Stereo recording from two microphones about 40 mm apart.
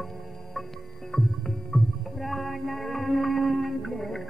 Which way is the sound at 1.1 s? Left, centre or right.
Centre.